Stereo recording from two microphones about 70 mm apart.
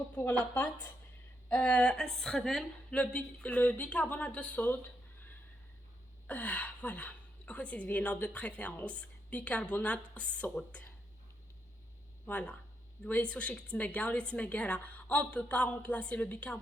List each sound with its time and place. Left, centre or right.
0.2 s a woman's voice: left
1.6 s speech: centre
2.9 s a woman's voice: centre
12.2 s a woman's voice: centre